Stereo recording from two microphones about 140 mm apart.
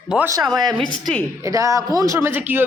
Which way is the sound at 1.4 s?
25° right (ahead or behind).